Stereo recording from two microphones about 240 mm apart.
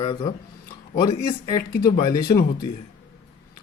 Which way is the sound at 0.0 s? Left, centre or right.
Centre.